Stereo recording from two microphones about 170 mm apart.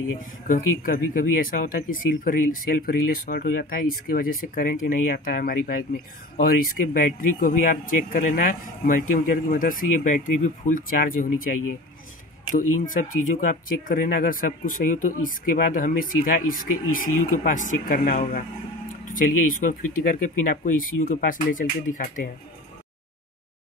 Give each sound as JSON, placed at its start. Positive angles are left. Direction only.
{"t": 0.5, "sound": "speech", "side_deg": 55}
{"t": 12.5, "sound": "speech", "side_deg": 50}